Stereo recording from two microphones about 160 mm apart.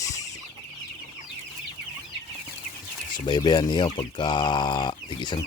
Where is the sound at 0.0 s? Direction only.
20° left (ahead or behind).